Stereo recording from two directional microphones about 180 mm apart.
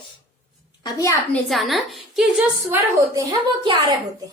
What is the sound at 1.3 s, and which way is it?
A woman's voice, centre (ahead or behind).